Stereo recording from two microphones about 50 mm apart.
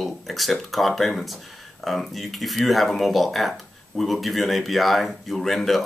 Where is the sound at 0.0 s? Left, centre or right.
Centre.